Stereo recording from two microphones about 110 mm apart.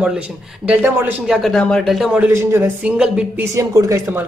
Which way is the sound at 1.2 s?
Centre (ahead or behind).